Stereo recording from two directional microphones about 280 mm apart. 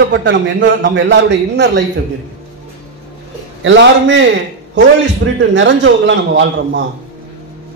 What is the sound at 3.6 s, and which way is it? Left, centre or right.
Speech, right.